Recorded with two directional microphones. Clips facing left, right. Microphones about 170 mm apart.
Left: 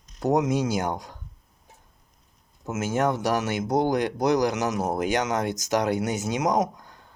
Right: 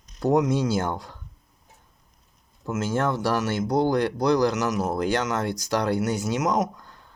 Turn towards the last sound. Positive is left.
turn(degrees=15)  # may be behind; listen again after turning